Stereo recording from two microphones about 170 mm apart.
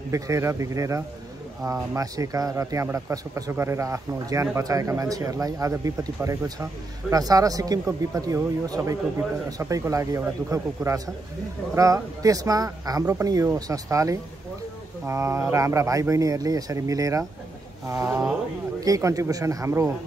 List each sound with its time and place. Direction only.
0.1 s speech: 15° right (ahead or behind)